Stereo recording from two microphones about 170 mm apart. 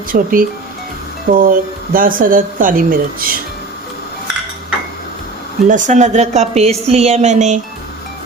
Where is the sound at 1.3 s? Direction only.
55° right (ahead or behind).